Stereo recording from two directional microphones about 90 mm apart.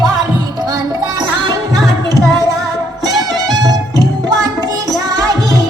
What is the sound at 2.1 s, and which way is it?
Music, 45° right (ahead or behind).